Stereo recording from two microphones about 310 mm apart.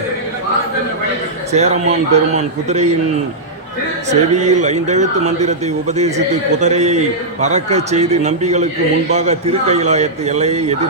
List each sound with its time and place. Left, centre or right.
1.5 s speech: right
4.1 s speech: right